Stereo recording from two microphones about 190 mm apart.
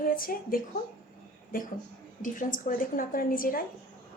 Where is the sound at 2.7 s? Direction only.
45° left (ahead or behind).